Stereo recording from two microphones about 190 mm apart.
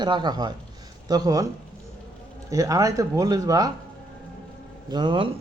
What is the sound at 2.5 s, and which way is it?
Speech, 15° right (ahead or behind).